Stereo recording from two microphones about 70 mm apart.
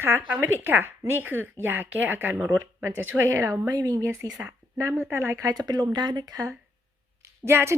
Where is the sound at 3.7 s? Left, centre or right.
Right.